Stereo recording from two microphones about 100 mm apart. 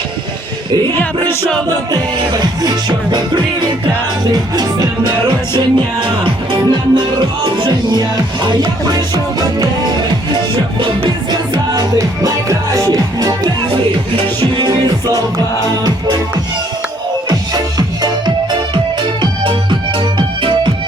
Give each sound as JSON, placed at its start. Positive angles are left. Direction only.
{"t": 0.9, "sound": "music", "side_deg": 20}
{"t": 1.9, "sound": "music", "side_deg": -40}
{"t": 5.5, "sound": "music", "side_deg": -55}
{"t": 10.3, "sound": "music", "side_deg": -55}
{"t": 11.9, "sound": "music", "side_deg": -30}
{"t": 14.2, "sound": "music", "side_deg": -55}
{"t": 17.2, "sound": "music", "side_deg": -40}
{"t": 19.2, "sound": "music", "side_deg": -55}